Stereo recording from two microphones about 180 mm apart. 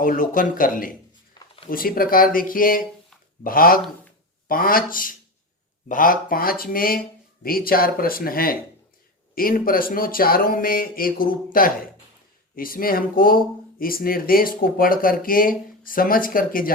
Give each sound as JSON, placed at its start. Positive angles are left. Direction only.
{"t": 0.0, "sound": "speech", "side_deg": 50}
{"t": 1.3, "sound": "a sound", "side_deg": 30}
{"t": 1.7, "sound": "speech", "side_deg": 55}